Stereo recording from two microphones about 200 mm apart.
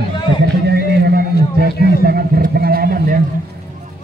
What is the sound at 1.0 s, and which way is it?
Speech, 50° right (ahead or behind).